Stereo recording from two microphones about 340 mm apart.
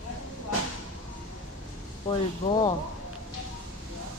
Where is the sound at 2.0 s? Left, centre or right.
Centre.